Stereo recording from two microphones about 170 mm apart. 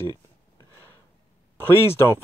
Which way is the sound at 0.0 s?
20° left (ahead or behind).